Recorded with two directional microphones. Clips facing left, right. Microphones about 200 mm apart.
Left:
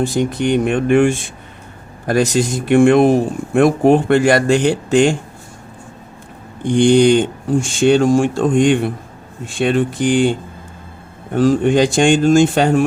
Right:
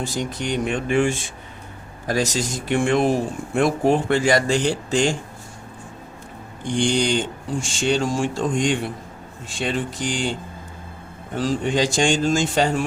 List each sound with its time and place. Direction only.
0.0 s speech: 60° left (ahead or behind)
6.6 s speech: 55° left (ahead or behind)
11.3 s speech: 55° left (ahead or behind)